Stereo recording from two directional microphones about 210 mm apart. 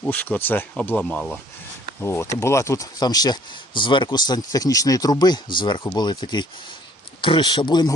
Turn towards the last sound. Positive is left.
turn(degrees=20)  # may be behind; listen again after turning